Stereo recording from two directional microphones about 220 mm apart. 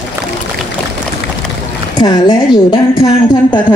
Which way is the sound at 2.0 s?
20° left (ahead or behind).